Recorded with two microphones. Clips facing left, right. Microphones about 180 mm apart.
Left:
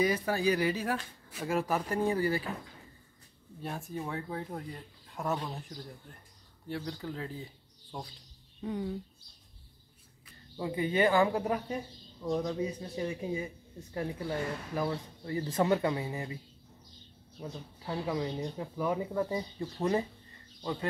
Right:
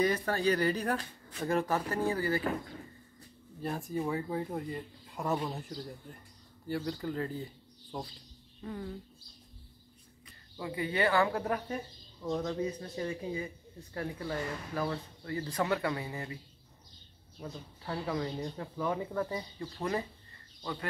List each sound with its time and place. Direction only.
0.0 s speech: 10° left (ahead or behind)
3.6 s speech: centre (ahead or behind)
10.6 s speech: 25° left (ahead or behind)
17.4 s speech: 15° left (ahead or behind)